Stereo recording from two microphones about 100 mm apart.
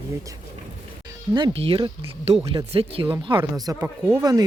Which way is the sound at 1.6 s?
65° right (ahead or behind).